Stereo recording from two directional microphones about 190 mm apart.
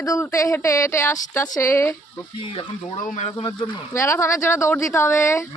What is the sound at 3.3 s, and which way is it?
Speech, 25° left (ahead or behind).